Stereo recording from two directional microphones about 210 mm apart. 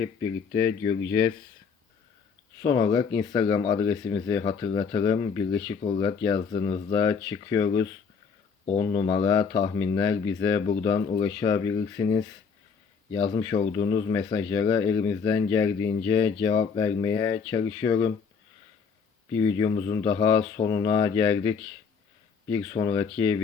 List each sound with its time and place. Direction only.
0.0 s speech: 15° left (ahead or behind)
2.6 s speech: 20° left (ahead or behind)
19.3 s speech: 15° left (ahead or behind)